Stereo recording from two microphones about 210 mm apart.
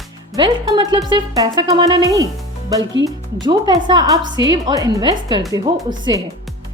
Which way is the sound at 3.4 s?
20° right (ahead or behind).